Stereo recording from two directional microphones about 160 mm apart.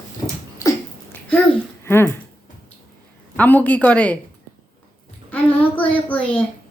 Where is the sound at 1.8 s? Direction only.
15° left (ahead or behind).